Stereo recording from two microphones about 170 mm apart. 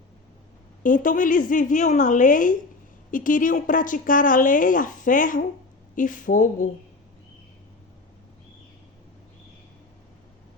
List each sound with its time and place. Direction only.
0.8 s a woman's voice: 50° left (ahead or behind)